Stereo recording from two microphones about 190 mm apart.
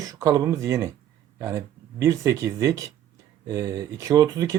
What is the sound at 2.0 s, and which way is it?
Speech, 15° right (ahead or behind).